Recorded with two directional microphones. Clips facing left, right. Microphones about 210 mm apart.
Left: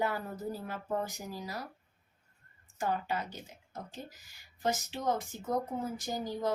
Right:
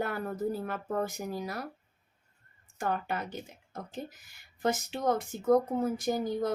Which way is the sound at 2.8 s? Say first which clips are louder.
Right 1 dB; 55° right (ahead or behind).